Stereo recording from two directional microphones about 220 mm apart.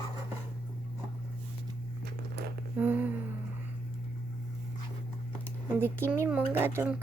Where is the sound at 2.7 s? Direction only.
10° right (ahead or behind).